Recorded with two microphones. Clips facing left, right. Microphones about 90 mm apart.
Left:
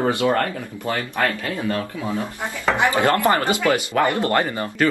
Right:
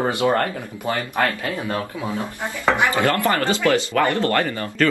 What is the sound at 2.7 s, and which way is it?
Speech, 20° left (ahead or behind).